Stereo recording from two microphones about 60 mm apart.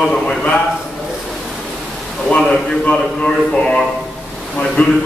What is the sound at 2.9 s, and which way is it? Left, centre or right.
A man's voice, centre.